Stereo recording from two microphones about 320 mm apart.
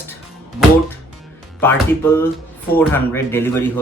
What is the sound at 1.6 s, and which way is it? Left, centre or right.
Speech, centre.